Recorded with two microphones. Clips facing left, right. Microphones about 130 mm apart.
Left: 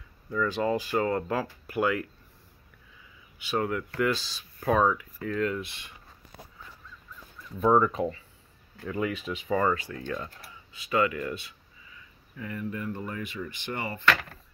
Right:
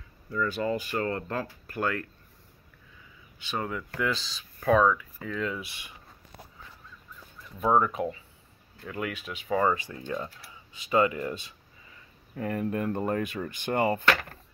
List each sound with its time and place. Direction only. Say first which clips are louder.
0.4 s speech: left 2 dB; 90° left
0.9 s speech: left 3 dB; 5° left (ahead or behind)
3.3 s speech: left 4 dB; 5° left (ahead or behind)
7.6 s speech: left 2 dB; 5° right (ahead or behind)
9.7 s speech: even; 15° right (ahead or behind)
12.4 s speech: right 5 dB; 50° right (ahead or behind)